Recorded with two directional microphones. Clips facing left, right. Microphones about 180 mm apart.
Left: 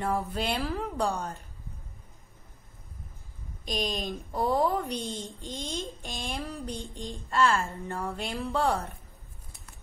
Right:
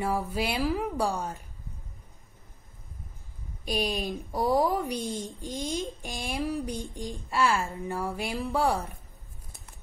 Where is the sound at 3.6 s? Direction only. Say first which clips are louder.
Right 2 dB; 10° right (ahead or behind).